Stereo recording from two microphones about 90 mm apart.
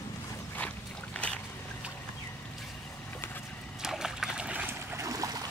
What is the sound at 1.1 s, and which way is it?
Boat, 15° left (ahead or behind).